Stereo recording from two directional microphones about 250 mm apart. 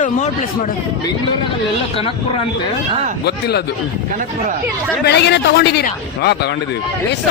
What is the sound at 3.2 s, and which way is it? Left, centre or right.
Speech, left.